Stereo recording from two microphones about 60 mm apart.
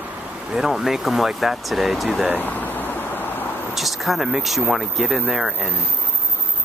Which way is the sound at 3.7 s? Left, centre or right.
Centre.